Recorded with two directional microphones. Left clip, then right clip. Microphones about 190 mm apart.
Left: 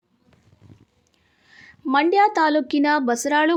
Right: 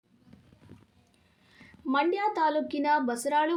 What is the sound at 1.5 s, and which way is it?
A woman's voice, 45° left (ahead or behind).